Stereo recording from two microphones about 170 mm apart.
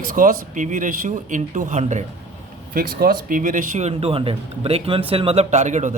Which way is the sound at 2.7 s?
60° right (ahead or behind).